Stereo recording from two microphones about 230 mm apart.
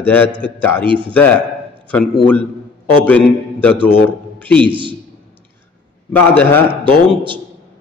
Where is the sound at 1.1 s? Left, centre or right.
Centre.